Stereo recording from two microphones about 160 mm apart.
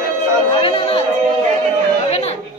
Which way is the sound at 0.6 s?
35° left (ahead or behind).